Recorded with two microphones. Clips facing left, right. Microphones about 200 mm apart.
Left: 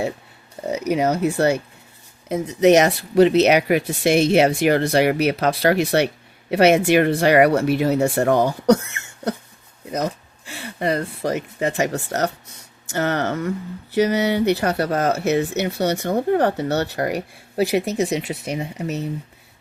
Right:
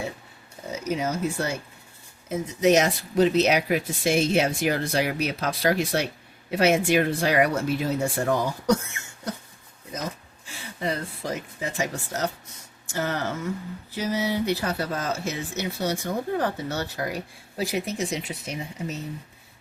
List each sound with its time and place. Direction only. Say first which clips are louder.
0.7 s speech: left 7 dB; 65° left (ahead or behind)